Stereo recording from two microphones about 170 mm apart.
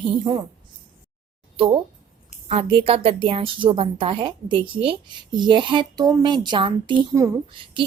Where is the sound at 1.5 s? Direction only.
30° right (ahead or behind).